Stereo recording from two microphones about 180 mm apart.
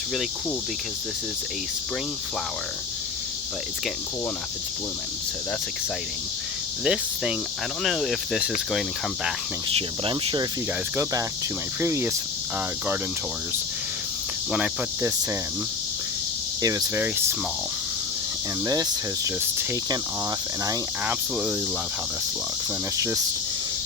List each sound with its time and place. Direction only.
6.8 s speech: 5° right (ahead or behind)
9.7 s speech: 30° right (ahead or behind)
11.8 s cricket: 15° right (ahead or behind)
14.5 s cricket: 10° right (ahead or behind)
16.6 s cricket: 20° right (ahead or behind)
18.6 s speech: 20° right (ahead or behind)
20.7 s cricket: 10° right (ahead or behind)
23.0 s cricket: 15° right (ahead or behind)